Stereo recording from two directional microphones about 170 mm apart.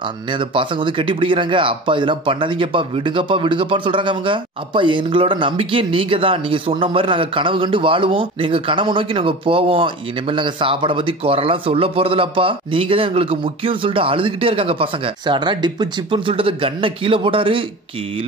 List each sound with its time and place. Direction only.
0.3 s speech: 30° right (ahead or behind)